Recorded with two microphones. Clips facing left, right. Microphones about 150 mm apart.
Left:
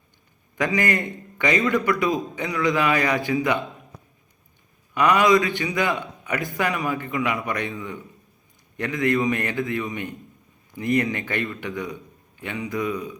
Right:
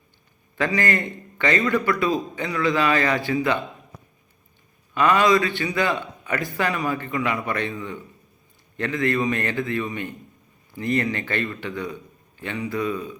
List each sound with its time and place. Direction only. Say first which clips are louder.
0.5 s a man's voice: even; 15° left (ahead or behind)
4.9 s a man's voice: even; 15° left (ahead or behind)
8.8 s a man's voice: left 1 dB; 15° left (ahead or behind)